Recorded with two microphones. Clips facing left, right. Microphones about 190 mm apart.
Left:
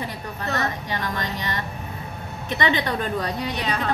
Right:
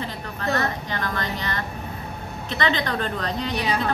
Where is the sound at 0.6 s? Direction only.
15° left (ahead or behind).